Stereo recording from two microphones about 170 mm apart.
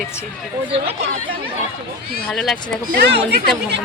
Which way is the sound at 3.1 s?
90° right.